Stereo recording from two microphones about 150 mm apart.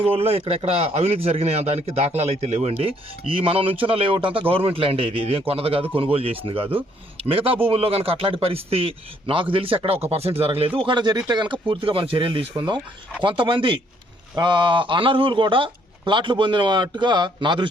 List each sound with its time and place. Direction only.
0.1 s a man's voice: 40° right (ahead or behind)